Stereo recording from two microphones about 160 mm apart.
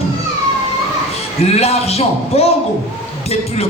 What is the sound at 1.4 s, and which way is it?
A man's voice, 40° left (ahead or behind).